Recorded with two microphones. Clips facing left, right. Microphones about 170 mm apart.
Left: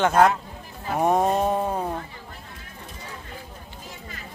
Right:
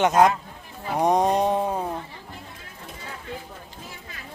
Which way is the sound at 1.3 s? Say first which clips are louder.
Right 1 dB; 15° right (ahead or behind).